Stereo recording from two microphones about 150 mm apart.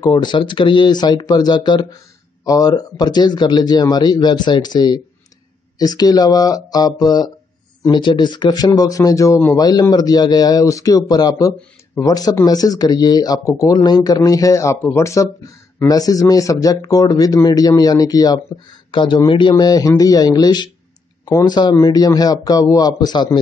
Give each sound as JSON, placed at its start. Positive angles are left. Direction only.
{"t": 0.0, "sound": "a man's voice", "side_deg": 30}